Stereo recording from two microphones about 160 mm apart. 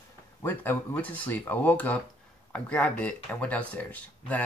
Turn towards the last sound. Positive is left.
turn(degrees=10)  # may be behind; listen again after turning